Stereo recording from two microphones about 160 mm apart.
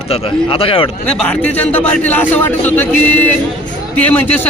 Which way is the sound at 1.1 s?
10° left (ahead or behind).